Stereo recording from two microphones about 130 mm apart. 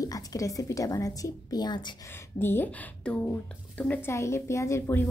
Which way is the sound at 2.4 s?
15° left (ahead or behind).